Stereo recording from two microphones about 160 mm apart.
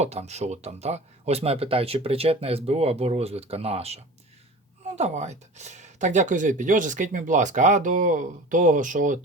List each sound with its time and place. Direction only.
0.0 s speech: 45° right (ahead or behind)